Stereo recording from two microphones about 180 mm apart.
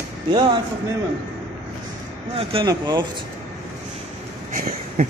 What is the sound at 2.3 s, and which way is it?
Speech, 25° right (ahead or behind).